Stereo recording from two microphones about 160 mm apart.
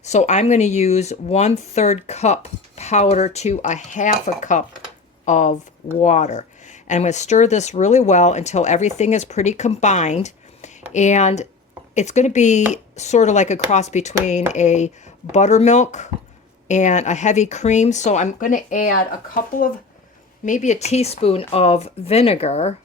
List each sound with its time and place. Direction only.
0.0 s a woman's voice: 45° left (ahead or behind)